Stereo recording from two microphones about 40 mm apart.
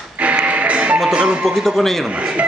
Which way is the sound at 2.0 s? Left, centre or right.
Right.